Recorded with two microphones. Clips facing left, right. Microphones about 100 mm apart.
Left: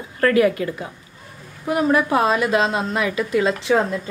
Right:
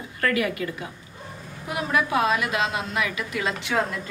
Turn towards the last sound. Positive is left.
turn(degrees=25)  # may be behind; listen again after turning